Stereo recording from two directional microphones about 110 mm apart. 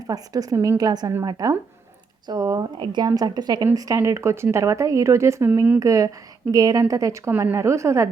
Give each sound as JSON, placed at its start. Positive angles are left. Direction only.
{"t": 0.1, "sound": "speech", "side_deg": -35}